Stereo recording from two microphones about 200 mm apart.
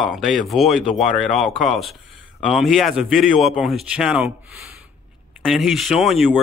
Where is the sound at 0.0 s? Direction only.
Centre (ahead or behind).